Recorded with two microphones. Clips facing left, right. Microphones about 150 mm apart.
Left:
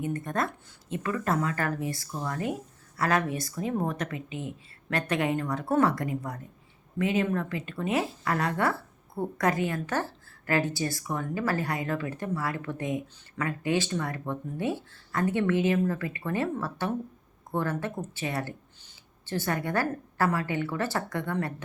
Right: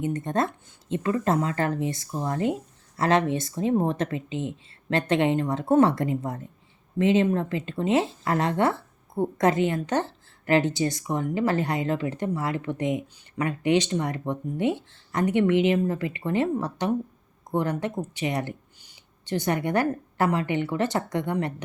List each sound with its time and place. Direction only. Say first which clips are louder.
0.0 s a woman's voice: right 4 dB; 20° right (ahead or behind)